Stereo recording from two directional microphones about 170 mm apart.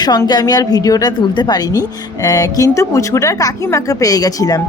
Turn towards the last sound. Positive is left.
turn(degrees=20)  # may be behind; listen again after turning